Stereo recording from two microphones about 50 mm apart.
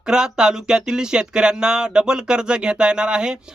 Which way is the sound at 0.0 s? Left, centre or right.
Centre.